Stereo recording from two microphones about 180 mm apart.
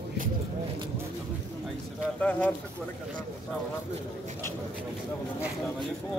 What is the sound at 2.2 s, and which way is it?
Speech, 10° left (ahead or behind).